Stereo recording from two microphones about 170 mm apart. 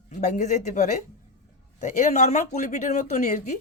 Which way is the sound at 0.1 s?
45° left (ahead or behind).